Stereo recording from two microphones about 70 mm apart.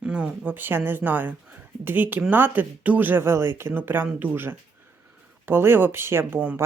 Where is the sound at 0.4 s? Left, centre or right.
Right.